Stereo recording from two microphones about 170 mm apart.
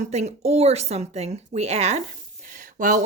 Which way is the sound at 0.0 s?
40° right (ahead or behind).